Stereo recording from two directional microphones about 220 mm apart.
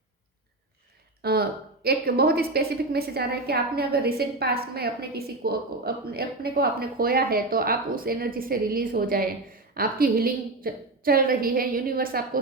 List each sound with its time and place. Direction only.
1.2 s a woman's voice: 45° right (ahead or behind)